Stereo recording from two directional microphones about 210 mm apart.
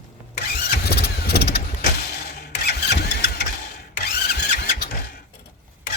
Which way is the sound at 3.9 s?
45° left (ahead or behind).